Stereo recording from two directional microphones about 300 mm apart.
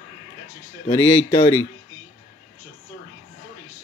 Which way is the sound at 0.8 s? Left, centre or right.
Centre.